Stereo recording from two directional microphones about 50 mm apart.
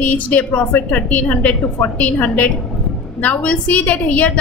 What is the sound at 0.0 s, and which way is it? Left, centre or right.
A woman's voice, left.